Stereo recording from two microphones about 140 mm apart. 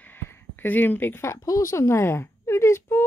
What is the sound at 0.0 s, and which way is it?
Speech, 15° left (ahead or behind).